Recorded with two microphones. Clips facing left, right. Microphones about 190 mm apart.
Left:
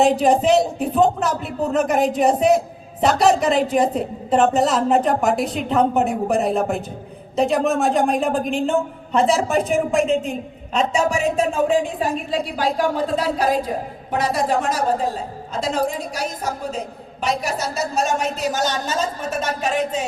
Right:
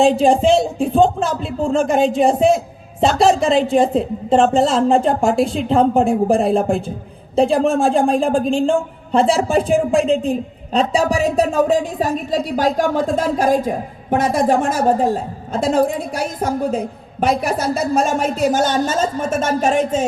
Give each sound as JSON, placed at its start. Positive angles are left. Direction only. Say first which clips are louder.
{"t": 0.0, "sound": "a woman's voice", "louder": "right 3 dB", "side_deg": -30}